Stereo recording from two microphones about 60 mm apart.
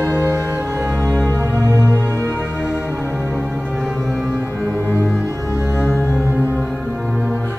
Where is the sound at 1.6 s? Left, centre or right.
Right.